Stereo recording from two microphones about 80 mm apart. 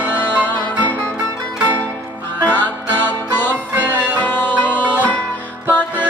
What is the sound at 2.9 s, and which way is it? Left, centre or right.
Music, left.